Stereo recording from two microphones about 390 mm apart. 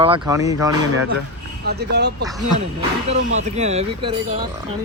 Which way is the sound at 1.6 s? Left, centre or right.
Right.